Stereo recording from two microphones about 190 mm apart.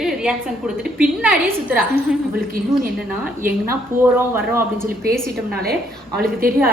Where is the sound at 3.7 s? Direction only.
10° right (ahead or behind).